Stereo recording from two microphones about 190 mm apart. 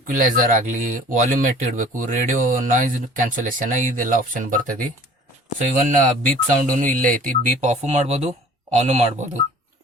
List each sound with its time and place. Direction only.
0.1 s speech: 45° right (ahead or behind)
5.9 s speech: 45° right (ahead or behind)